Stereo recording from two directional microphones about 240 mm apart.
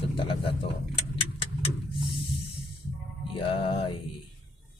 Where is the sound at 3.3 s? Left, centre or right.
Left.